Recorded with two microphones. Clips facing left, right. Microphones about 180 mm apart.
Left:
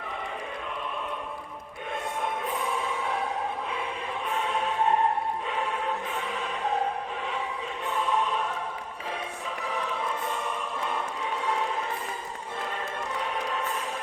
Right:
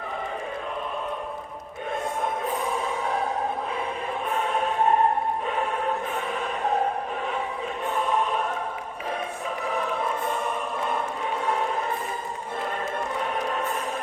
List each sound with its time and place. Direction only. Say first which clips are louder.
2.2 s music: right 1 dB; 40° right (ahead or behind)
4.3 s music: right 3 dB; 50° right (ahead or behind)
7.9 s choir: right 2 dB; 50° right (ahead or behind)
9.6 s choir: right 4 dB; 50° right (ahead or behind)
11.4 s a sound: right 3 dB; 50° right (ahead or behind)
13.1 s music: right 2 dB; 50° right (ahead or behind)